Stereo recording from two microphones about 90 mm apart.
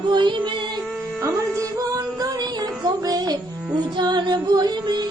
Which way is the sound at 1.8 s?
40° right (ahead or behind).